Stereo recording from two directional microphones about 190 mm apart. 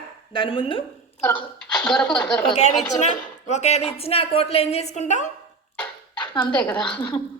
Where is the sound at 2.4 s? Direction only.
35° left (ahead or behind).